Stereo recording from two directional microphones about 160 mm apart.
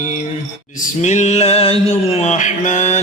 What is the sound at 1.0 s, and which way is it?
Mantra, 45° left (ahead or behind).